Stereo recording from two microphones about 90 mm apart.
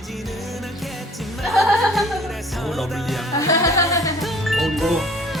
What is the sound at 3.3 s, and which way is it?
Music, 35° left (ahead or behind).